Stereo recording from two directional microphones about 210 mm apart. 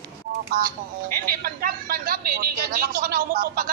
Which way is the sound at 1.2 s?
45° right (ahead or behind).